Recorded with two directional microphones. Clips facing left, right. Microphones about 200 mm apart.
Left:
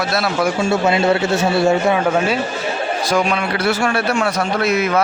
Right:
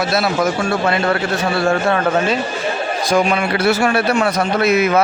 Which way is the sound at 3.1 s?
5° right (ahead or behind).